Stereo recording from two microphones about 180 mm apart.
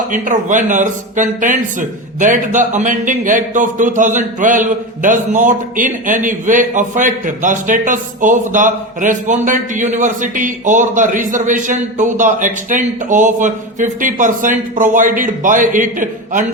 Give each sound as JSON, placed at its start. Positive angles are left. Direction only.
{"t": 0.1, "sound": "speech", "side_deg": -45}